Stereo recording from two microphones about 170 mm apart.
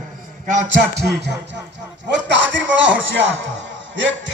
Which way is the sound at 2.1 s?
90° right.